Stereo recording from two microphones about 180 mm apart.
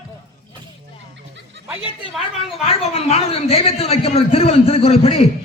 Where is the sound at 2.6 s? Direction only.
35° left (ahead or behind).